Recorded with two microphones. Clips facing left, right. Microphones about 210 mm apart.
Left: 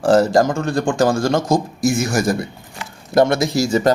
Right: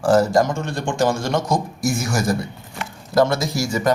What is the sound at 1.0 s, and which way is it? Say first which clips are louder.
Speech: left 2 dB; 30° left (ahead or behind).